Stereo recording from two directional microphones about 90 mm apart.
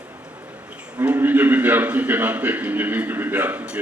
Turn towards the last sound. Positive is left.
turn(degrees=-20)  # may be behind; listen again after turning